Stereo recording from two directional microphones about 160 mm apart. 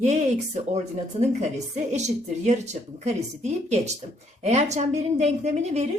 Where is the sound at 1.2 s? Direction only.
45° right (ahead or behind).